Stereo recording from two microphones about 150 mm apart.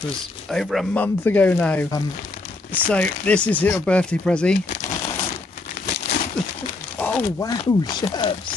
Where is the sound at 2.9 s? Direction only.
10° left (ahead or behind).